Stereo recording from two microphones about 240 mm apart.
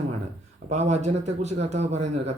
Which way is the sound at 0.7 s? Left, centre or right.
Right.